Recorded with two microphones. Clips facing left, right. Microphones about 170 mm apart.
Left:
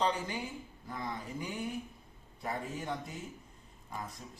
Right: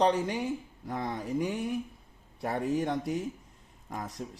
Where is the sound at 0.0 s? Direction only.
80° right.